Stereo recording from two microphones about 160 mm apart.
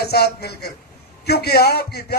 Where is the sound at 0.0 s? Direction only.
90° left.